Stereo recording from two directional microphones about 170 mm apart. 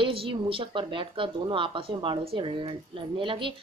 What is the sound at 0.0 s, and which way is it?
Speech, 30° right (ahead or behind).